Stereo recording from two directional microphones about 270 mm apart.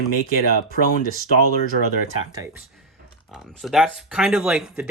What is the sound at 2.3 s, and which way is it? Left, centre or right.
Speech, centre.